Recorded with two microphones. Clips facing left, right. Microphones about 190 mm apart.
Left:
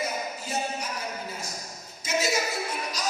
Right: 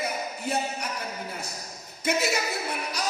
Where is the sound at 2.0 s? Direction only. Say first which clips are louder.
Right 1 dB; 60° right (ahead or behind).